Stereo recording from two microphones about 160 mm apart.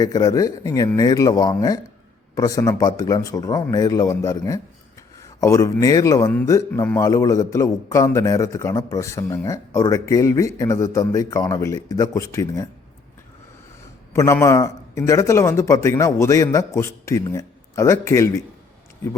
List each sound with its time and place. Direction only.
0.0 s a man's voice: 25° left (ahead or behind)
14.1 s a man's voice: 15° left (ahead or behind)